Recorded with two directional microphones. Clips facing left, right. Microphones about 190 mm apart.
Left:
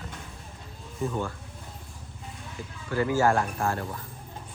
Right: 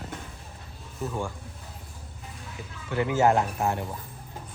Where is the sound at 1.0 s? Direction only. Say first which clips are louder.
Left 2 dB; 10° right (ahead or behind).